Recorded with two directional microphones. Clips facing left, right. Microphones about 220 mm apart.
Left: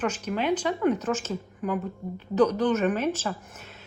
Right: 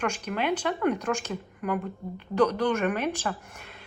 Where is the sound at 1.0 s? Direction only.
15° right (ahead or behind).